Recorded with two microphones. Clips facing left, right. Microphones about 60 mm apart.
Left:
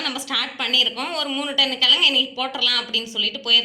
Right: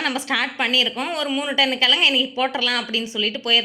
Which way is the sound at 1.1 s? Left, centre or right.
Centre.